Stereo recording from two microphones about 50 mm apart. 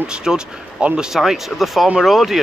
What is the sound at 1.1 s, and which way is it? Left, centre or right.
Speech, centre.